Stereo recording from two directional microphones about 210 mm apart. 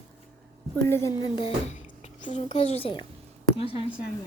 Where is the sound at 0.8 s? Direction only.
15° left (ahead or behind).